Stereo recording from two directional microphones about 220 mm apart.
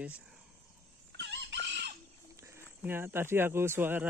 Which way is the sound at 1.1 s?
50° right (ahead or behind).